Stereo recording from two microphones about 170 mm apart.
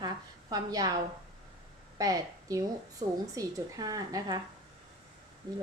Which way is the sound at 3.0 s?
40° right (ahead or behind).